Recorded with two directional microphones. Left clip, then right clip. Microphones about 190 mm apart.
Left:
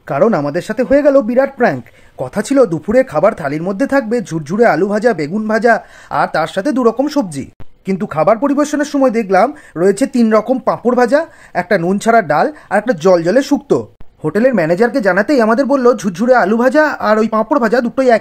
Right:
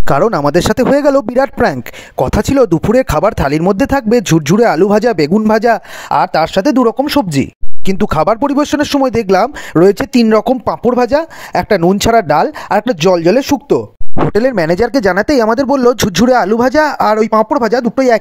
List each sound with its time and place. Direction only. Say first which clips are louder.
0.1 s speech: right 3 dB; 60° right (ahead or behind); by 7.4 s 35° right (ahead or behind)
7.8 s speech: right 2 dB; 55° right (ahead or behind)
14.3 s speech: left 1 dB; 55° right (ahead or behind); by 18.1 s 35° right (ahead or behind)